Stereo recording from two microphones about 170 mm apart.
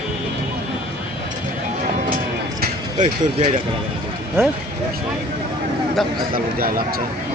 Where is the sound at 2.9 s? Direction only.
30° right (ahead or behind).